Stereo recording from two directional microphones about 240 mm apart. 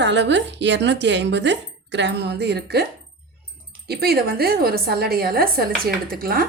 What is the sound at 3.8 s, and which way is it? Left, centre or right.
Speech, right.